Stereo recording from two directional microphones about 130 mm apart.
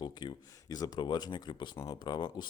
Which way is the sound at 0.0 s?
35° left (ahead or behind).